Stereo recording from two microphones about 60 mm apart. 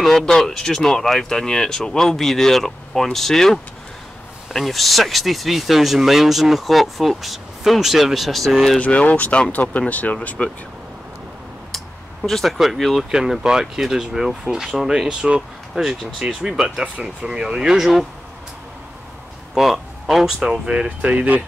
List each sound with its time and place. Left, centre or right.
0.0 s speech: centre
8.7 s speech: left
11.7 s a sound: centre
13.1 s speech: centre
16.8 s speech: centre
19.5 s speech: centre; by 21.4 s right